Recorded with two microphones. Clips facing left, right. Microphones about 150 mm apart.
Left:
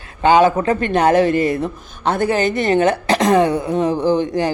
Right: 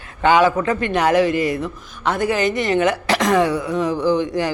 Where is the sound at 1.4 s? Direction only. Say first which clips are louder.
Left 3 dB; 30° left (ahead or behind).